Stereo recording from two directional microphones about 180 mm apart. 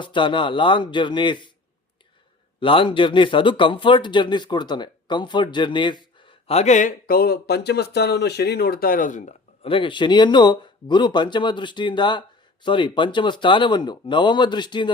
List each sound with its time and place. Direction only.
0.0 s speech: 25° left (ahead or behind)
2.6 s speech: 30° left (ahead or behind)